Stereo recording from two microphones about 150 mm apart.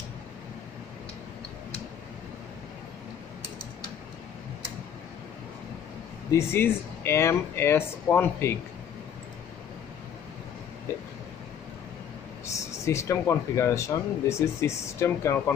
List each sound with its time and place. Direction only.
6.3 s speech: 15° left (ahead or behind)
12.8 s speech: 20° left (ahead or behind)